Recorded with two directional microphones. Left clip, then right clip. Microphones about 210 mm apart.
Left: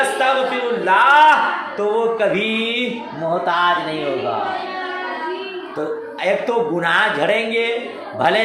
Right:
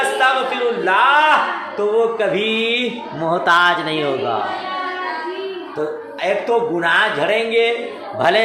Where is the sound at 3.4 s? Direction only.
25° right (ahead or behind).